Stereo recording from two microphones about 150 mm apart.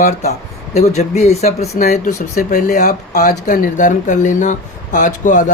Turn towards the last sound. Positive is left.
turn(degrees=60)  # may be behind; listen again after turning